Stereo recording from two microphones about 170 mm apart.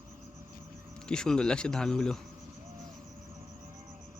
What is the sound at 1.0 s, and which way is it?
Speech, 5° left (ahead or behind).